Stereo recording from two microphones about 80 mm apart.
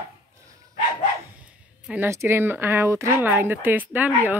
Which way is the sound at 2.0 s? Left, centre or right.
Right.